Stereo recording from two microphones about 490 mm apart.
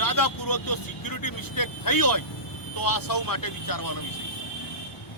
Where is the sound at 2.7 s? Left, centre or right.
Left.